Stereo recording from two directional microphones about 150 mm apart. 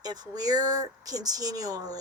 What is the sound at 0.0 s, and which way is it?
Speech, 25° right (ahead or behind).